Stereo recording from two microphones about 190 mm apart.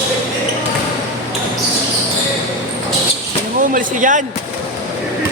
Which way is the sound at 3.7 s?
40° right (ahead or behind).